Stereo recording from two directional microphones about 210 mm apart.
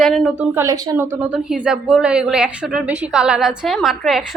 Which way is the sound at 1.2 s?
5° right (ahead or behind).